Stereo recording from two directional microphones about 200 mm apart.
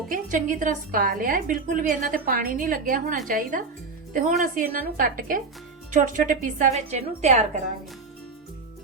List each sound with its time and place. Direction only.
0.1 s a woman's voice: 40° right (ahead or behind)